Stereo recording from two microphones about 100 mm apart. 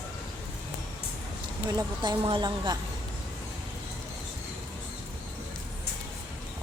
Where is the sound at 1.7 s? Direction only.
45° right (ahead or behind).